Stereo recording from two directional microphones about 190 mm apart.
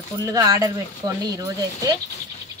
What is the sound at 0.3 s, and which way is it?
Speech, 20° right (ahead or behind).